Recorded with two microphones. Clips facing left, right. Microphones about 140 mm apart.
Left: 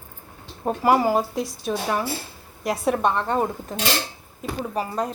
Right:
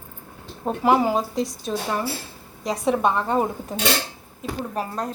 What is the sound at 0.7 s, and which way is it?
Speech, 5° left (ahead or behind).